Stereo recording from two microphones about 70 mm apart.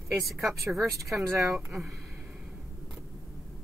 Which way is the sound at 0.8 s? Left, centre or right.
Right.